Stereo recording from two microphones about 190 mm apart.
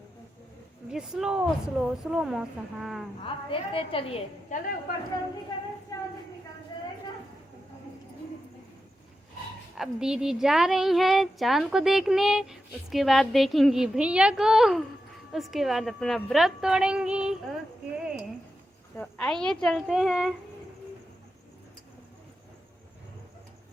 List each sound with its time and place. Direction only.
0.9 s a woman's voice: 5° right (ahead or behind)
3.2 s a woman's voice: 30° left (ahead or behind)
9.7 s a woman's voice: centre (ahead or behind)
17.9 s a sound: 5° right (ahead or behind)
18.9 s a woman's voice: 5° left (ahead or behind)